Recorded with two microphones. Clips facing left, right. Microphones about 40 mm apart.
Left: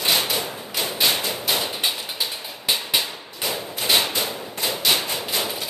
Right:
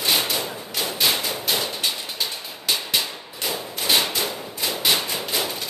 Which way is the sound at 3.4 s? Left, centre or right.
Centre.